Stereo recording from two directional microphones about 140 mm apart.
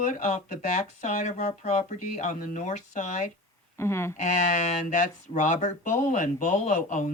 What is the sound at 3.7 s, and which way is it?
Speech, 20° left (ahead or behind).